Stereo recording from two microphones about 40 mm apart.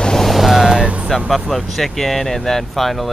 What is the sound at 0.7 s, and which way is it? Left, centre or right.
Music, right.